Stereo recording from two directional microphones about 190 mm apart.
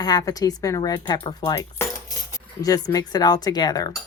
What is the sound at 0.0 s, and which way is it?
Speech, 20° left (ahead or behind).